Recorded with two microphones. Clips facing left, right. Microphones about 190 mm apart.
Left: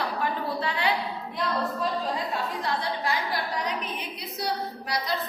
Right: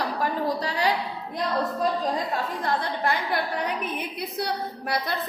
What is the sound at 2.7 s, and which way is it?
Speech, 55° right (ahead or behind).